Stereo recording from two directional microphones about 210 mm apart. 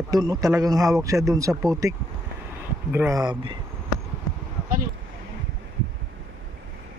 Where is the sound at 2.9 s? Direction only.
15° right (ahead or behind).